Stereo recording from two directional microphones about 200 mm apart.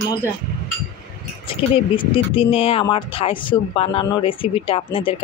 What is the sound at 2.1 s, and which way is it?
Speech, 25° left (ahead or behind).